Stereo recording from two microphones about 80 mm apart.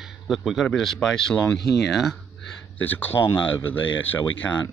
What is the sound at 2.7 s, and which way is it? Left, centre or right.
Speech, left.